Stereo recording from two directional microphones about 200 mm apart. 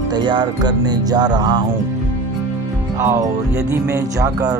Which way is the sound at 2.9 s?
15° right (ahead or behind).